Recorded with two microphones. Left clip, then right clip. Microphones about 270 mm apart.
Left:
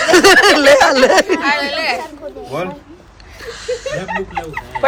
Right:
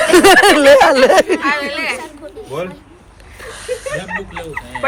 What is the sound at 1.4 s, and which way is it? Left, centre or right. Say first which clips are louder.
Speech: left 1 dB; left.